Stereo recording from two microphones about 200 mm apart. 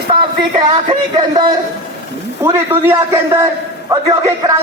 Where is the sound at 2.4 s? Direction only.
10° right (ahead or behind).